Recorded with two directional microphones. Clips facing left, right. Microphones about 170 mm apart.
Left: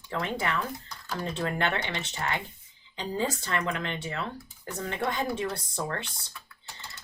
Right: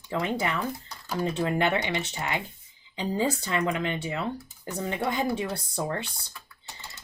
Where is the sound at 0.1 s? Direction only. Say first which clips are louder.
Right 2 dB; 10° right (ahead or behind).